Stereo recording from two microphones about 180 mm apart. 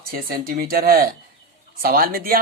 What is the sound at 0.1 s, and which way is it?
Speech, 55° right (ahead or behind).